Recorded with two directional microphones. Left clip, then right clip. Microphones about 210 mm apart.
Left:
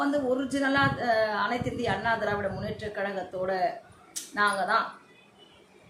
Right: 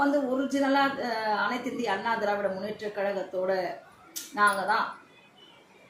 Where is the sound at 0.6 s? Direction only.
20° left (ahead or behind).